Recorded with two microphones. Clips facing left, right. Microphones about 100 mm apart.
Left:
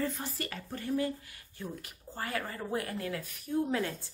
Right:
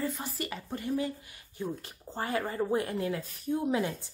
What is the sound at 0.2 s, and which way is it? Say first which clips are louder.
A woman's voice: right 2 dB; 15° right (ahead or behind).